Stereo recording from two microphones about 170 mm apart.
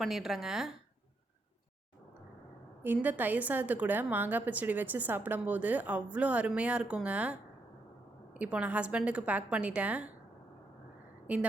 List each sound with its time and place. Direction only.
0.0 s speech: centre (ahead or behind)
2.8 s a woman's voice: 10° right (ahead or behind)